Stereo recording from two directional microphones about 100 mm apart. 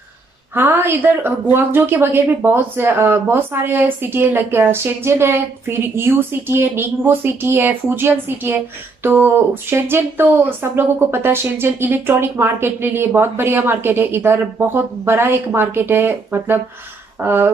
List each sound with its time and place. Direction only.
0.6 s a woman's voice: 20° right (ahead or behind)